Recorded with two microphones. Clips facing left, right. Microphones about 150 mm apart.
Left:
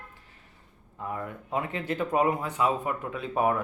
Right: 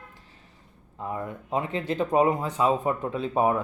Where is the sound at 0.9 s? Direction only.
20° right (ahead or behind).